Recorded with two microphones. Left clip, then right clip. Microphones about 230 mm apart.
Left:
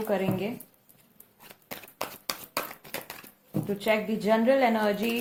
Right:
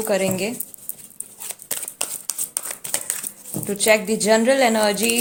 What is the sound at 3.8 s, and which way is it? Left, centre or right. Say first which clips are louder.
Speech: right 10 dB; right.